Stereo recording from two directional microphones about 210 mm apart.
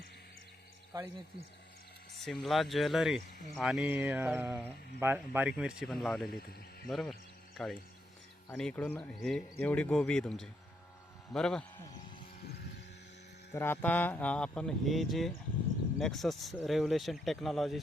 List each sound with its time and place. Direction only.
0.9 s mantra: 20° right (ahead or behind)
2.2 s speech: centre (ahead or behind)
3.6 s mantra: centre (ahead or behind)
4.9 s speech: 10° right (ahead or behind)
13.5 s speech: 10° left (ahead or behind)